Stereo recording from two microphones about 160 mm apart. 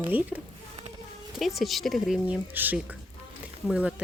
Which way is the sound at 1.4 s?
Centre (ahead or behind).